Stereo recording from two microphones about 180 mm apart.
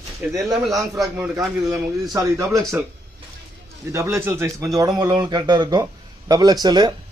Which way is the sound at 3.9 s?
15° right (ahead or behind).